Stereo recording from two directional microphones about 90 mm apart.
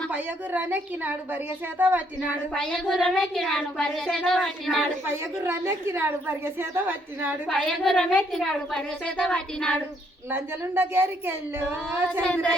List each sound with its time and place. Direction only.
0.1 s a woman's voice: 20° right (ahead or behind)
2.5 s speech: 10° left (ahead or behind)
5.0 s a woman's voice: 30° right (ahead or behind)
7.4 s a woman's voice: 5° left (ahead or behind)
10.3 s a woman's voice: 25° right (ahead or behind)
12.2 s a woman's voice: 10° left (ahead or behind)